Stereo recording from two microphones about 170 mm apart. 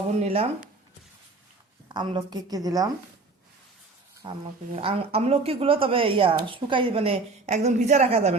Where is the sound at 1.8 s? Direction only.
25° right (ahead or behind).